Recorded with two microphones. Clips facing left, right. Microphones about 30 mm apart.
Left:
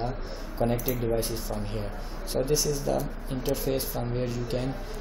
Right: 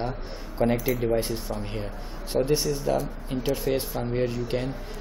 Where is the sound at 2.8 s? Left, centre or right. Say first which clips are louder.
Right 2 dB; centre.